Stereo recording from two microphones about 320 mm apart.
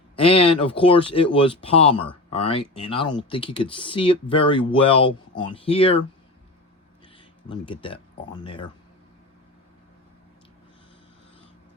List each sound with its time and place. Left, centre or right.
0.2 s speech: centre
7.4 s speech: centre